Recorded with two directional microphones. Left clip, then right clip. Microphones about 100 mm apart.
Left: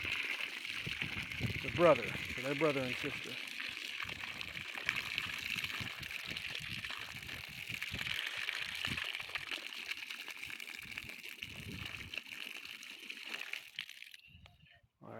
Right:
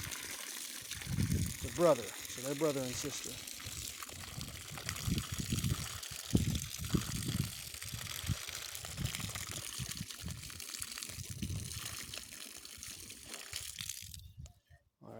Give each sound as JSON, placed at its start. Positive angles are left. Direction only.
{"t": 0.0, "sound": "water", "side_deg": -65}
{"t": 10.7, "sound": "gush", "side_deg": -10}
{"t": 11.8, "sound": "water", "side_deg": -35}
{"t": 13.3, "sound": "water", "side_deg": -35}